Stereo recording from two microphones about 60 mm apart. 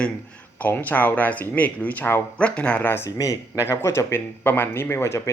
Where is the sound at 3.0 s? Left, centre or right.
Left.